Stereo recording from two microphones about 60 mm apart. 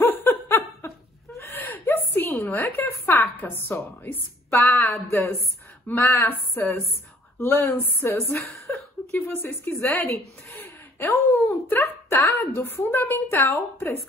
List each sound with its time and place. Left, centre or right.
0.0 s laughter: left
1.7 s a sound: left
2.9 s a woman's voice: left
3.3 s a woman's voice: left
8.7 s a sound: left
9.1 s a woman's voice: left